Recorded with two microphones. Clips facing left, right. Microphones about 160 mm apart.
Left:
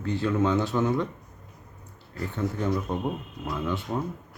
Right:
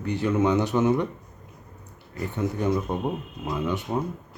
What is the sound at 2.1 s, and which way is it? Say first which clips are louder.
Speech: right 2 dB; 20° right (ahead or behind).